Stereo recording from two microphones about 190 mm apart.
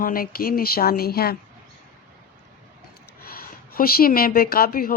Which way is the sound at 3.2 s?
50° left (ahead or behind).